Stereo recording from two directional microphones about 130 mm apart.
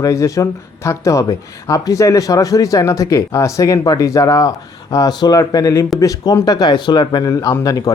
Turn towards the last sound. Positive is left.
turn(degrees=30)  # may be behind; listen again after turning